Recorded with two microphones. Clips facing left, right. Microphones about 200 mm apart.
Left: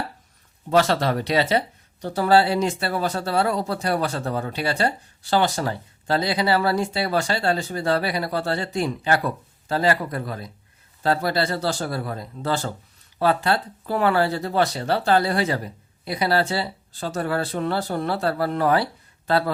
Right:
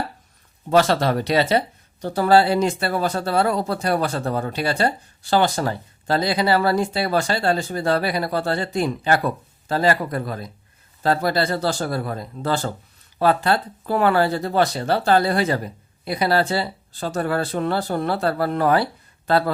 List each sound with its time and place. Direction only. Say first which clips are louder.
0.7 s speech: right 2 dB; 45° right (ahead or behind)